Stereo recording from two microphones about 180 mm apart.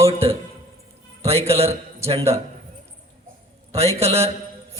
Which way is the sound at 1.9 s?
35° right (ahead or behind).